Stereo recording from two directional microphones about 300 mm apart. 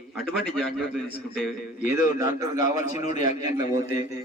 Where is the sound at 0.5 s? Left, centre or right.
Centre.